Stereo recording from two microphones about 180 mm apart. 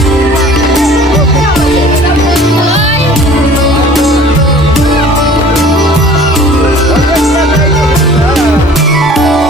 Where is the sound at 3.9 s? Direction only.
Centre (ahead or behind).